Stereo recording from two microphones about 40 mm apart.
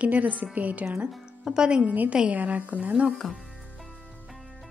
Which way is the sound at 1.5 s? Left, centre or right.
Right.